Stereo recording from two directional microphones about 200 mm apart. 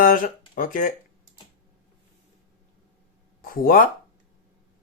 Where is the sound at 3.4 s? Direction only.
45° left (ahead or behind).